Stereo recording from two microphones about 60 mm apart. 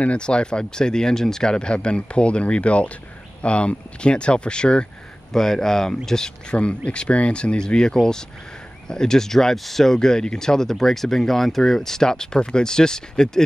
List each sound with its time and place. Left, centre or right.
0.0 s speech: centre